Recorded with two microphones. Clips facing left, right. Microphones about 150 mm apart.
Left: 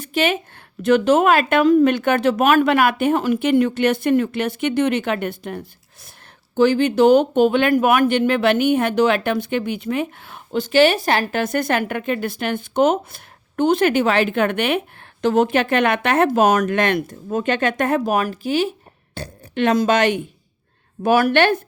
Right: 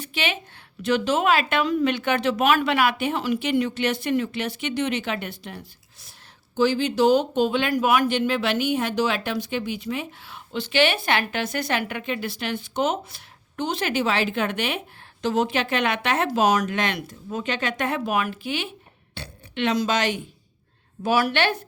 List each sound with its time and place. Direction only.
0.0 s speech: 45° left (ahead or behind)